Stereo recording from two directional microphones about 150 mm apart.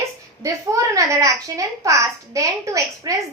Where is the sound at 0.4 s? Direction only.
20° right (ahead or behind).